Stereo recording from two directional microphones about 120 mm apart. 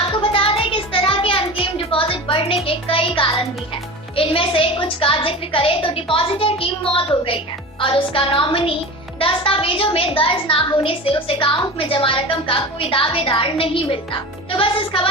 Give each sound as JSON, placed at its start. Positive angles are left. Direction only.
{"t": 0.2, "sound": "a sound", "side_deg": 50}
{"t": 2.6, "sound": "music", "side_deg": 50}
{"t": 4.1, "sound": "a woman's voice", "side_deg": 50}